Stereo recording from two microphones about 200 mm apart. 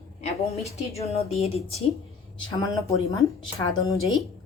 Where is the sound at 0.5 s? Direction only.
30° left (ahead or behind).